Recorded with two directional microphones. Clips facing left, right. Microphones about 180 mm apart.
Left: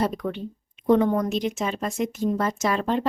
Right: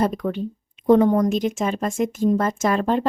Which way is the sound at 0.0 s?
45° right (ahead or behind).